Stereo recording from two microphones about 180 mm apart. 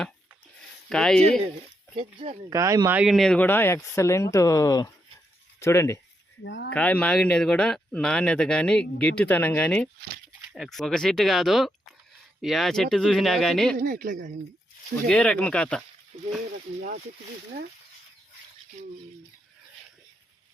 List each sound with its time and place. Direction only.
0.9 s speech: 5° left (ahead or behind)
2.0 s speech: 35° right (ahead or behind)
2.5 s speech: 20° right (ahead or behind)
3.0 s speech: centre (ahead or behind); by 6.0 s 15° left (ahead or behind)
6.4 s speech: 75° left (ahead or behind)
6.7 s speech: 5° left (ahead or behind)
13.7 s speech: 50° right (ahead or behind)
15.0 s speech: 5° left (ahead or behind)